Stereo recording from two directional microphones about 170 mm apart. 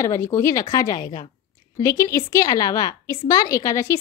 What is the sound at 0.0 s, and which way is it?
A woman's voice, 15° left (ahead or behind).